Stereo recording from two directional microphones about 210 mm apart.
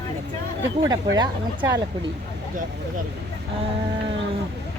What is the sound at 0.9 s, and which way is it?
Speech, 20° right (ahead or behind).